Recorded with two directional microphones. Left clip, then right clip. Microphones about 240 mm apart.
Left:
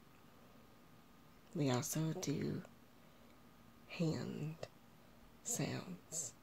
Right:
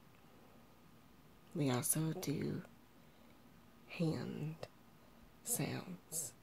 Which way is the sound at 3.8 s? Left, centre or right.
Centre.